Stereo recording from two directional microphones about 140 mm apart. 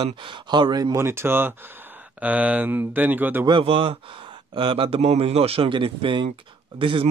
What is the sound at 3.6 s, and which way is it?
Speech, 40° right (ahead or behind).